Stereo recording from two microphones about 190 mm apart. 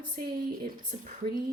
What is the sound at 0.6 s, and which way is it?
Speech, 50° right (ahead or behind).